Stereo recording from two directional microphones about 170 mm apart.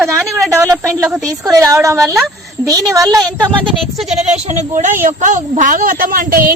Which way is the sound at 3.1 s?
Centre (ahead or behind).